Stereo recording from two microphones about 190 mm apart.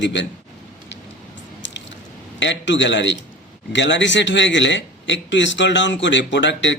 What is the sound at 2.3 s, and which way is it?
Speech, 70° left (ahead or behind).